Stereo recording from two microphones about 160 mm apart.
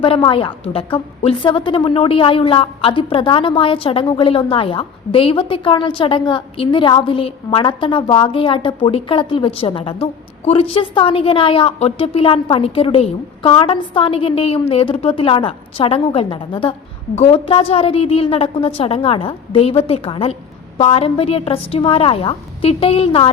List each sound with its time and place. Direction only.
0.0 s a woman's voice: 35° left (ahead or behind)